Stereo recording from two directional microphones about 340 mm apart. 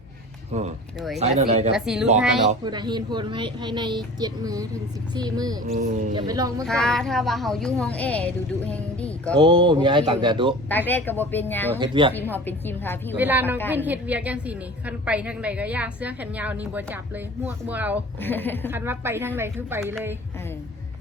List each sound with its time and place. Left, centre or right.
0.5 s speech: centre
0.9 s a woman's voice: centre
1.2 s speech: centre
1.7 s a woman's voice: centre
2.5 s a woman's voice: centre
6.7 s a woman's voice: centre
9.4 s a woman's voice: centre
10.7 s a woman's voice: centre
11.8 s a woman's voice: centre
12.3 s a woman's voice: centre
13.1 s a woman's voice: centre
18.2 s a woman's voice: centre
18.7 s a woman's voice: centre